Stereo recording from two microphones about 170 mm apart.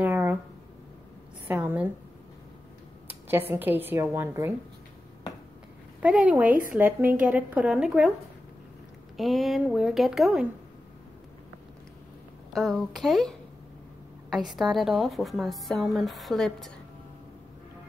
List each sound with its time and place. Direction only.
0.0 s a sound: 10° right (ahead or behind)
1.5 s speech: 10° right (ahead or behind)
3.3 s speech: 10° right (ahead or behind)
6.0 s speech: 10° right (ahead or behind)
9.1 s a woman's voice: centre (ahead or behind)
12.5 s a woman's voice: centre (ahead or behind)